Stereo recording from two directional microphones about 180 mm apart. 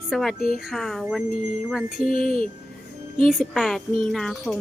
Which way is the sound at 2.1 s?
50° left (ahead or behind).